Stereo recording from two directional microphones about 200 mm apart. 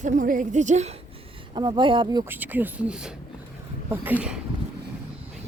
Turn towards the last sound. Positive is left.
turn(degrees=-5)  # may be behind; listen again after turning